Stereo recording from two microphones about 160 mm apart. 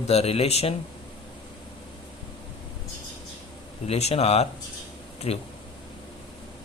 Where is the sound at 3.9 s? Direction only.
40° left (ahead or behind).